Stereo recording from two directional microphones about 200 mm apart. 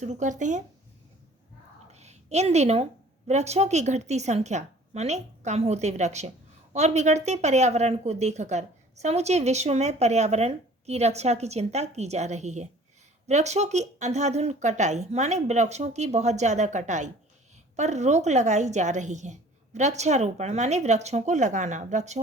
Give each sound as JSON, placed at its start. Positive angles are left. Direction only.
{"t": 0.0, "sound": "speech", "side_deg": -35}
{"t": 1.9, "sound": "a sound", "side_deg": -35}
{"t": 3.2, "sound": "speech", "side_deg": -35}